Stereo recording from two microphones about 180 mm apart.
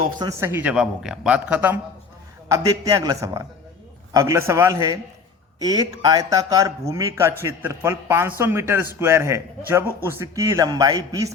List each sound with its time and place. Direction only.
0.2 s a man's voice: 15° right (ahead or behind)